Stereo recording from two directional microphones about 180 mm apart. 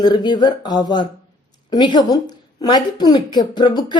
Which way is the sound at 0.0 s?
25° left (ahead or behind).